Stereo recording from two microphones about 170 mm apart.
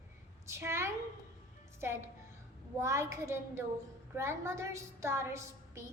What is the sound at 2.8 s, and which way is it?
A woman's voice, 15° right (ahead or behind).